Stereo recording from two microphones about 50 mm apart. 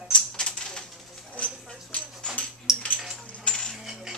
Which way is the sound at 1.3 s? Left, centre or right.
Left.